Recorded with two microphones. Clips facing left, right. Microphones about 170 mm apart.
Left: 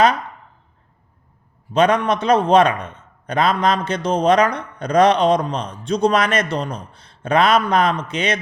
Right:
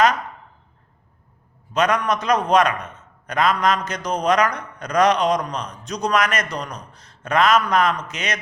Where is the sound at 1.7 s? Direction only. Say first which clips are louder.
Left 4 dB; 30° left (ahead or behind).